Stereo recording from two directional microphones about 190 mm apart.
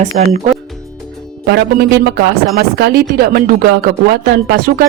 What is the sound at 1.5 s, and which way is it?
Speech, 60° right (ahead or behind).